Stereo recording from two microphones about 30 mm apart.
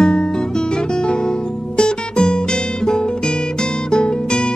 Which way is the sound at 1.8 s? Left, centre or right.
Left.